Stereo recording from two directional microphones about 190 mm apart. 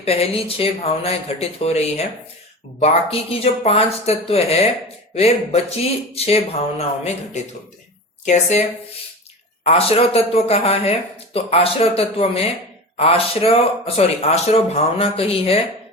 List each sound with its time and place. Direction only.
0.0 s speech: 30° left (ahead or behind)
9.6 s speech: 30° left (ahead or behind)